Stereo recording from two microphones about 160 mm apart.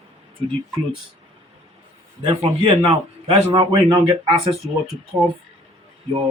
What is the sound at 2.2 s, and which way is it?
A man's voice, 35° right (ahead or behind).